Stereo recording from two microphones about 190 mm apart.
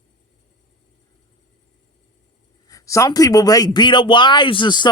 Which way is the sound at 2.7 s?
15° left (ahead or behind).